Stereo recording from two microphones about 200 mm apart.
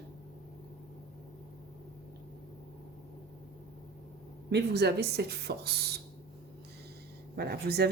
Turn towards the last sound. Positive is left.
turn(degrees=-50)  # may be behind; listen again after turning